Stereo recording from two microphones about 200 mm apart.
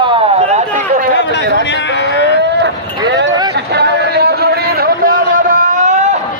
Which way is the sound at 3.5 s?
55° right (ahead or behind).